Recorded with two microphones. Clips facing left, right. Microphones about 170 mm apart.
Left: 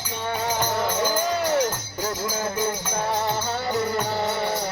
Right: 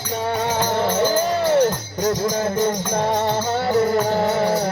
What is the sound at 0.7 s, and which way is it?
Music, 30° right (ahead or behind).